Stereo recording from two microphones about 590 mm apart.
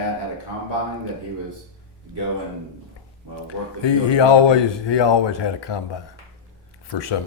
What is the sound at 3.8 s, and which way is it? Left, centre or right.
Speech, left.